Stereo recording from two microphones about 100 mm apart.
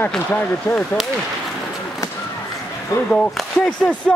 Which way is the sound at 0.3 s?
20° left (ahead or behind).